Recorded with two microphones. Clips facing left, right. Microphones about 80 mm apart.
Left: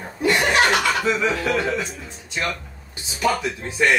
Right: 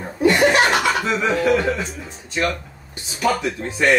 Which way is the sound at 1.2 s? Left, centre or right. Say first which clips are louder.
Right 4 dB; right.